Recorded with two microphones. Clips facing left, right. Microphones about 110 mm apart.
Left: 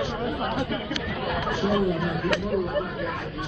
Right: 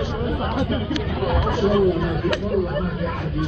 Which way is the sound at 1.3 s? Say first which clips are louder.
Right 5 dB; 30° right (ahead or behind).